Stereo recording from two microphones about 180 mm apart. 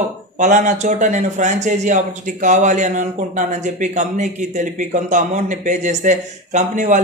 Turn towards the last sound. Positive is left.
turn(degrees=-45)  # may be behind; listen again after turning